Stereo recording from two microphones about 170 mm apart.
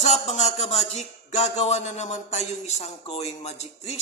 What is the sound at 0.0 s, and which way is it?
Music, 40° left (ahead or behind).